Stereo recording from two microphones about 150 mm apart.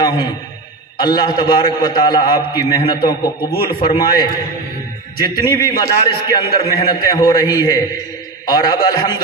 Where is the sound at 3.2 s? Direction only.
90° left.